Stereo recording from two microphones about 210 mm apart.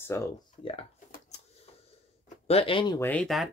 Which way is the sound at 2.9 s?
10° left (ahead or behind).